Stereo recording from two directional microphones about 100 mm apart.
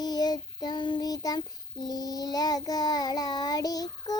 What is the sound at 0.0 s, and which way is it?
Child singing, 40° left (ahead or behind).